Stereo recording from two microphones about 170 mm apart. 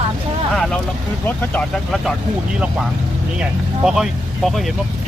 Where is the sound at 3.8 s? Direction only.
Centre (ahead or behind).